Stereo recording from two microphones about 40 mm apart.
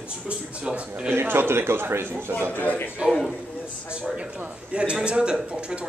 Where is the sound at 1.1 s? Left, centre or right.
Right.